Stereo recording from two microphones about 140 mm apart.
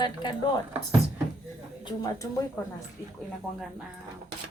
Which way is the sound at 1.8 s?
25° left (ahead or behind).